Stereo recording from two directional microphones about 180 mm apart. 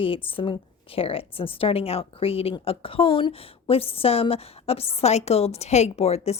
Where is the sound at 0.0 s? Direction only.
30° left (ahead or behind).